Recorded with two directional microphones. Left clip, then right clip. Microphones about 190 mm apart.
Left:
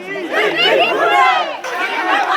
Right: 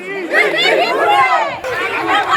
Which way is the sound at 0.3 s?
15° right (ahead or behind).